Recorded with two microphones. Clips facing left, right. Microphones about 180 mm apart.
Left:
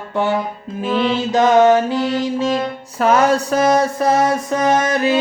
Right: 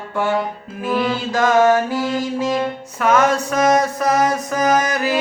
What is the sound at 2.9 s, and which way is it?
Music, 35° left (ahead or behind).